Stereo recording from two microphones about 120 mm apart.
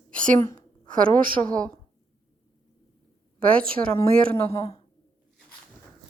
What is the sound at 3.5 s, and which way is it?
A woman's voice, 10° left (ahead or behind).